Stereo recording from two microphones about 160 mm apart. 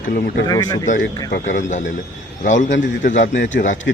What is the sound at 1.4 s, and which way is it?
Speech, 50° left (ahead or behind).